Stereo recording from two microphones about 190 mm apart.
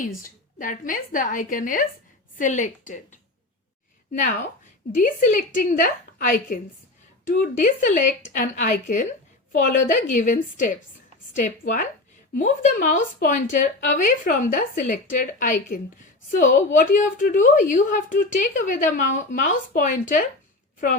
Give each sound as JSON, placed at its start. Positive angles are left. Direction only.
{"t": 0.2, "sound": "a woman's voice", "side_deg": 45}